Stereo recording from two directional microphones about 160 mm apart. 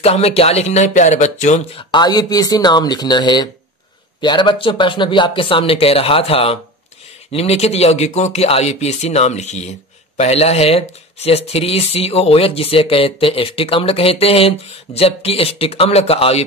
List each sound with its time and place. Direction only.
0.0 s speech: 40° left (ahead or behind)
1.9 s speech: 25° left (ahead or behind)